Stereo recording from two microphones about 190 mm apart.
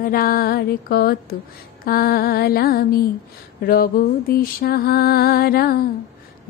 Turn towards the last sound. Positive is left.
turn(degrees=50)  # may be behind; listen again after turning